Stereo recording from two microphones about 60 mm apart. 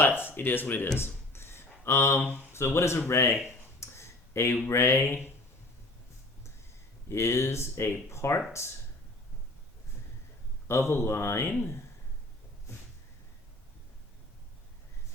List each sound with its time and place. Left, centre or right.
0.2 s speech: left
0.9 s a sound: left
2.5 s speech: left
3.4 s a sound: left
4.7 s speech: left
7.1 s speech: left
10.7 s speech: left